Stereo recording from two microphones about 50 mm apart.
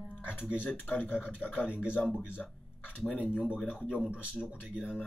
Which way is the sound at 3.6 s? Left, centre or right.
Left.